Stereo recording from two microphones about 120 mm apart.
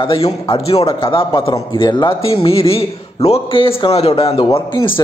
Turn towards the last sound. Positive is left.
turn(degrees=45)  # may be behind; listen again after turning